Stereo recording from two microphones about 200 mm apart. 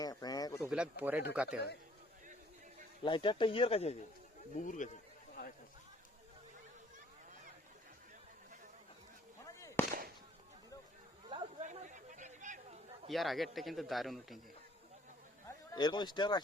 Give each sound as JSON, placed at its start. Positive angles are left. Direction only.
{"t": 0.0, "sound": "a sound", "side_deg": 20}
{"t": 0.7, "sound": "a man's voice", "side_deg": -5}
{"t": 1.5, "sound": "a man's voice", "side_deg": 55}
{"t": 3.0, "sound": "speech", "side_deg": 25}
{"t": 5.3, "sound": "a sound", "side_deg": 45}
{"t": 9.6, "sound": "firecracker", "side_deg": 15}
{"t": 11.3, "sound": "chatter", "side_deg": -25}
{"t": 11.6, "sound": "a sound", "side_deg": -35}
{"t": 13.1, "sound": "a man's voice", "side_deg": 0}
{"t": 15.7, "sound": "speech", "side_deg": 20}